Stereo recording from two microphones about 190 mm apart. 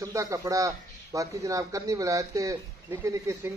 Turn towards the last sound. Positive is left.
turn(degrees=-15)  # may be behind; listen again after turning